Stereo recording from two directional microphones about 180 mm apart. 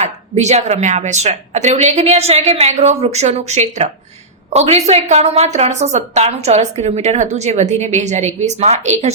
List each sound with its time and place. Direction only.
0.0 s a woman's voice: 40° right (ahead or behind)